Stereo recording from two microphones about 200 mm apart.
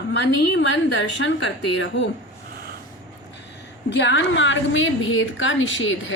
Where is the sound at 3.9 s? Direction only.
60° left (ahead or behind).